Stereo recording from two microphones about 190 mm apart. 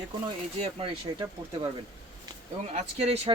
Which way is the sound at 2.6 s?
30° right (ahead or behind).